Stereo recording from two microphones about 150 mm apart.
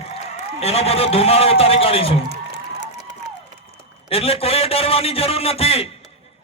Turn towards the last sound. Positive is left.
turn(degrees=40)  # may be behind; listen again after turning